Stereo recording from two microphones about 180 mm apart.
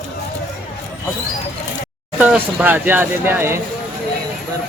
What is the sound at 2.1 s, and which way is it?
Speech, 10° right (ahead or behind).